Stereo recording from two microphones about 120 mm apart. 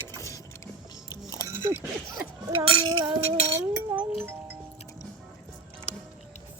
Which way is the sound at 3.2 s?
55° right (ahead or behind).